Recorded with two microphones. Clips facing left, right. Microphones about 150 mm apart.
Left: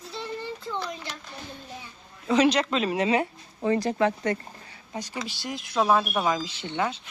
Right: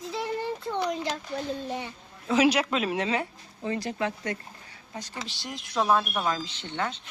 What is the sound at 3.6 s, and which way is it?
Speech, 50° left (ahead or behind).